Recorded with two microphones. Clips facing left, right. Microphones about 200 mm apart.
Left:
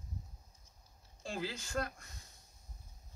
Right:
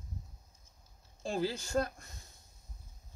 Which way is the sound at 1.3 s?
40° right (ahead or behind).